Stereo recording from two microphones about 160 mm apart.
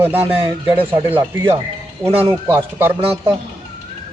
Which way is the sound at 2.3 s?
15° right (ahead or behind).